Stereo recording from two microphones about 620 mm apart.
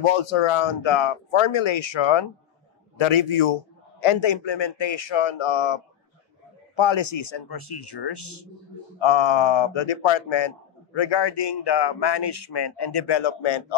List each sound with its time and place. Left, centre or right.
0.1 s speech: left